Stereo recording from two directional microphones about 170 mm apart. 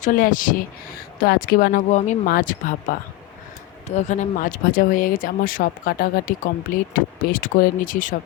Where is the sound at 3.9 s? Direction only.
45° left (ahead or behind).